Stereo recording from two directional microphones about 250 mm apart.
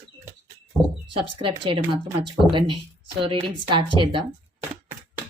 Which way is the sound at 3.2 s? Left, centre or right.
Right.